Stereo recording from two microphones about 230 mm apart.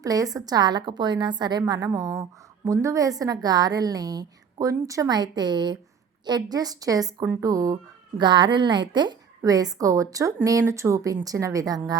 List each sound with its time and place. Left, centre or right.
0.0 s a woman's voice: centre